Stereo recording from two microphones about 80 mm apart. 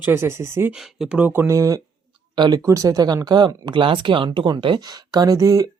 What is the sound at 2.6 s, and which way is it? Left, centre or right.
Speech, right.